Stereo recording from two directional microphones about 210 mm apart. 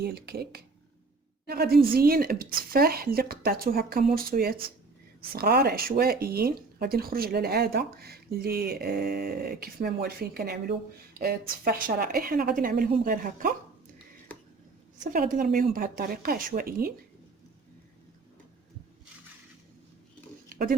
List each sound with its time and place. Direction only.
0.0 s speech: 50° right (ahead or behind)
15.0 s speech: 40° right (ahead or behind)
20.5 s a sound: 45° right (ahead or behind)